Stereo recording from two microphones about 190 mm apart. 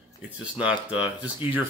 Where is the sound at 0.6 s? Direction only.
5° right (ahead or behind).